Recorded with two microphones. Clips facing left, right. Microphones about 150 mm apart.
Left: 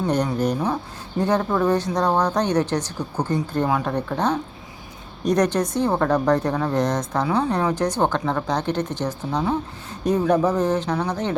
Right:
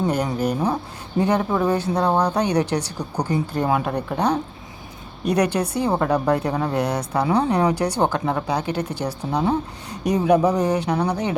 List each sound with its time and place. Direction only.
0.3 s a woman's voice: 10° right (ahead or behind)